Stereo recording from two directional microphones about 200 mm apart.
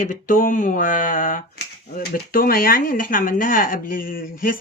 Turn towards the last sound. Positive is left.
turn(degrees=45)  # may be behind; listen again after turning